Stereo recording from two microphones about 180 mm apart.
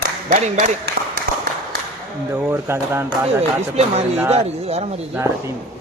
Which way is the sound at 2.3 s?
10° right (ahead or behind).